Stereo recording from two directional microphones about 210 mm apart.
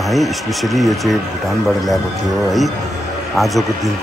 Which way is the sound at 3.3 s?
Centre (ahead or behind).